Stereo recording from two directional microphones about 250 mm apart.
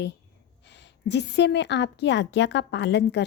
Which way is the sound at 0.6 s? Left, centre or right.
Left.